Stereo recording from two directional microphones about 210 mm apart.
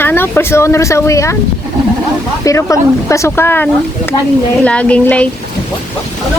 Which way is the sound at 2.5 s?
15° left (ahead or behind).